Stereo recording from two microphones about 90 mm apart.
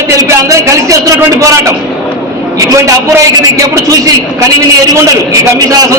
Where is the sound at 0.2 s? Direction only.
40° right (ahead or behind).